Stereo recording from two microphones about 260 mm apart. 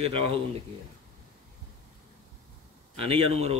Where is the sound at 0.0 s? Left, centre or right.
Right.